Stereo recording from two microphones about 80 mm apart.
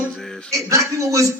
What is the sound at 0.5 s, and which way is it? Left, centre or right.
Speech, right.